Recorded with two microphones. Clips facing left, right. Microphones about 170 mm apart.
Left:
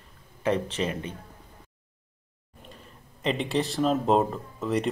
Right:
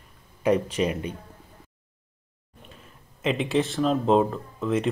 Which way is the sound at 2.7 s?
Centre (ahead or behind).